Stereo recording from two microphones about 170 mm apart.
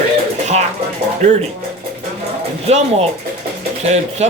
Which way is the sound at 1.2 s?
45° right (ahead or behind).